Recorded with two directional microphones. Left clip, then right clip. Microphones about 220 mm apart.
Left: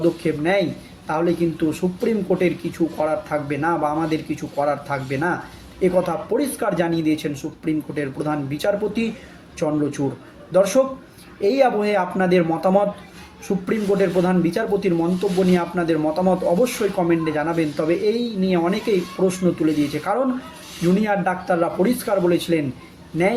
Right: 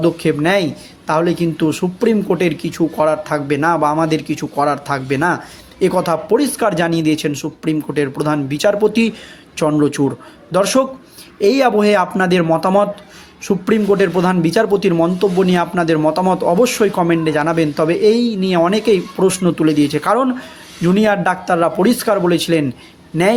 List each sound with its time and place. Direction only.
0.0 s a man's voice: 45° right (ahead or behind)